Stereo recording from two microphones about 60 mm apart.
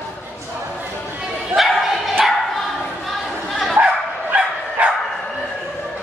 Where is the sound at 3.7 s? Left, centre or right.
Right.